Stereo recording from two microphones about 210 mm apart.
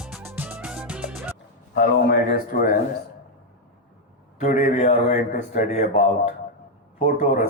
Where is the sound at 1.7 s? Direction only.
50° left (ahead or behind).